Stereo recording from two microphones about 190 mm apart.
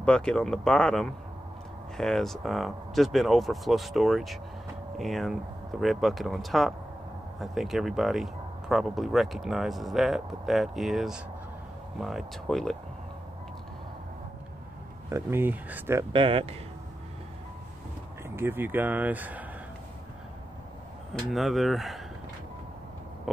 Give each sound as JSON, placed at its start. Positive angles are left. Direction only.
{"t": 0.0, "sound": "speech", "side_deg": 5}
{"t": 15.0, "sound": "speech", "side_deg": -15}
{"t": 16.1, "sound": "speech", "side_deg": -25}
{"t": 18.3, "sound": "speech", "side_deg": -10}
{"t": 21.1, "sound": "speech", "side_deg": 0}
{"t": 23.3, "sound": "speech", "side_deg": 0}